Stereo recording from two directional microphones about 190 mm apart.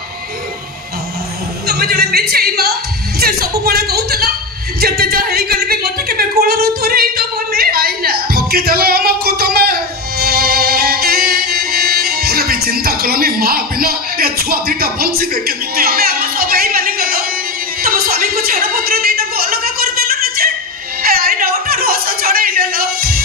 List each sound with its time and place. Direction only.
1.7 s speech: 55° right (ahead or behind)
4.7 s a sound: 55° right (ahead or behind)
17.8 s chuckle: 50° right (ahead or behind)
21.0 s music: 50° right (ahead or behind)